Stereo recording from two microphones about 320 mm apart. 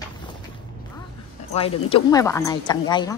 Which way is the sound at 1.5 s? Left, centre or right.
Centre.